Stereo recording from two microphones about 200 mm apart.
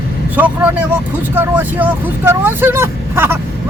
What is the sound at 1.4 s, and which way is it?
Speech, 10° right (ahead or behind).